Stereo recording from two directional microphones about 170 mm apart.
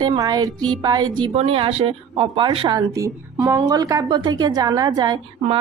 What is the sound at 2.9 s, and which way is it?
A woman's voice, 15° right (ahead or behind).